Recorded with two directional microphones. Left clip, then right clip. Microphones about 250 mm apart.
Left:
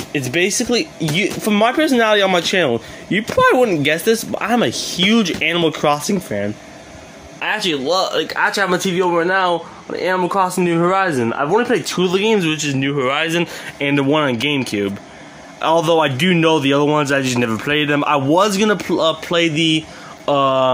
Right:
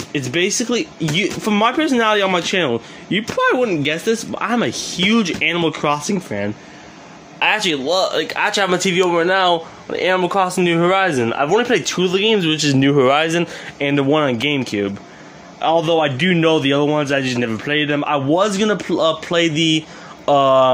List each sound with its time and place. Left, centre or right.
0.1 s speech: centre
12.5 s speech: centre
13.3 s speech: centre
15.6 s a man's voice: centre